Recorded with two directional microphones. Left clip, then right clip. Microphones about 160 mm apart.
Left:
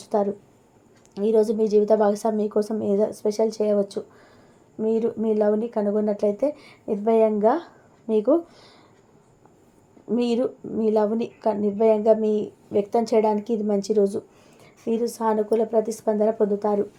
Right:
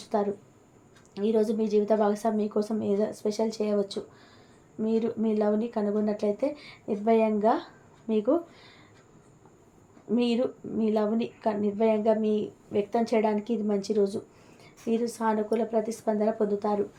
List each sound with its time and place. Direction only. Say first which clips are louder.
0.0 s a sound: left 5 dB; 40° left (ahead or behind)
1.1 s speech: left 6 dB; 40° left (ahead or behind)
10.1 s speech: left 4 dB; 40° left (ahead or behind)